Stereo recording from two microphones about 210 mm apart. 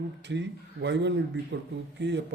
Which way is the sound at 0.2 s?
55° right (ahead or behind).